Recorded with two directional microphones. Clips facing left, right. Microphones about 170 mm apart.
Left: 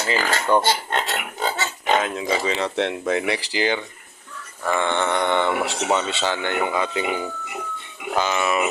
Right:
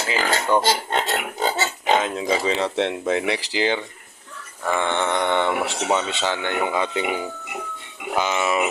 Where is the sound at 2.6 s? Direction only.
25° right (ahead or behind).